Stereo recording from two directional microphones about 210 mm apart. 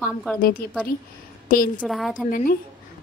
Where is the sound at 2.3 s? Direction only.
40° left (ahead or behind).